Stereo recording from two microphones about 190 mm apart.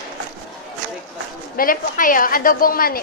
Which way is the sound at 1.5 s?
50° left (ahead or behind).